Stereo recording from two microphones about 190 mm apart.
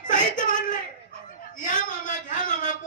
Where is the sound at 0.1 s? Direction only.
45° left (ahead or behind).